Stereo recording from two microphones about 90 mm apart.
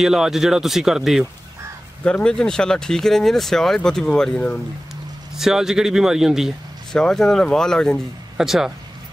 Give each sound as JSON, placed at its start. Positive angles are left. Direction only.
{"t": 0.0, "sound": "speech", "side_deg": -5}
{"t": 2.0, "sound": "speech", "side_deg": 10}
{"t": 5.3, "sound": "speech", "side_deg": -5}
{"t": 7.0, "sound": "speech", "side_deg": 5}
{"t": 8.4, "sound": "speech", "side_deg": -5}